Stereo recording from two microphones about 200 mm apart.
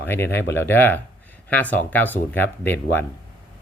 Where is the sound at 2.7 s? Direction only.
60° left (ahead or behind).